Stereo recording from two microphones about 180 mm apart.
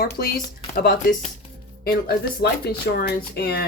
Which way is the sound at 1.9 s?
60° left (ahead or behind).